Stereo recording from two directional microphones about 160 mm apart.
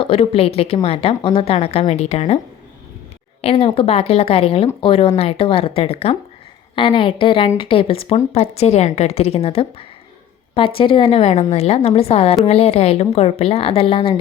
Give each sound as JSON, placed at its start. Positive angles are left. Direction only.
{"t": 0.0, "sound": "speech", "side_deg": 35}
{"t": 3.4, "sound": "speech", "side_deg": 35}